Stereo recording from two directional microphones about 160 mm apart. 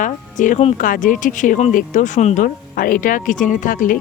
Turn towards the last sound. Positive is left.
turn(degrees=60)  # may be behind; listen again after turning